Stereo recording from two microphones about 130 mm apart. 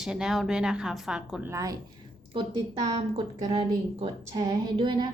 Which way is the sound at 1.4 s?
25° right (ahead or behind).